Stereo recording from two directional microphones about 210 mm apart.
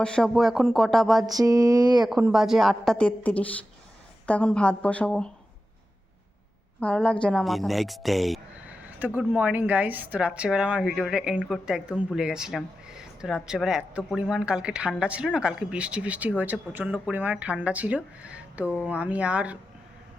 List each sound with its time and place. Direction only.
0.0 s a woman's voice: 5° left (ahead or behind)
1.3 s speech: 15° right (ahead or behind)
2.0 s a woman's voice: centre (ahead or behind)
6.7 s a woman's voice: 5° left (ahead or behind)